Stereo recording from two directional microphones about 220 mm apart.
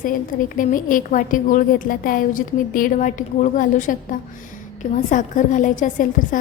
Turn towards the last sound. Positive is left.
turn(degrees=35)  # may be behind; listen again after turning